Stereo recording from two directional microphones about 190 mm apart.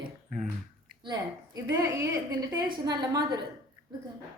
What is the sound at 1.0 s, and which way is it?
A woman's voice, 20° right (ahead or behind).